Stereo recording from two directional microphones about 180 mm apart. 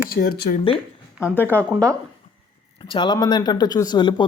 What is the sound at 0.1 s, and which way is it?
Speech, 60° left (ahead or behind).